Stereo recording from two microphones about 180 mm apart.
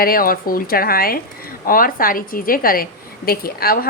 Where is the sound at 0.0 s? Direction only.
55° left (ahead or behind).